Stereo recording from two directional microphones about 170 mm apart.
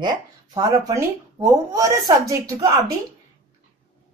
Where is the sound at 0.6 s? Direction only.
20° right (ahead or behind).